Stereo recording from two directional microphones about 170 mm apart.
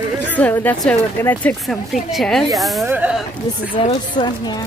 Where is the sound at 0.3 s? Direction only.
10° left (ahead or behind).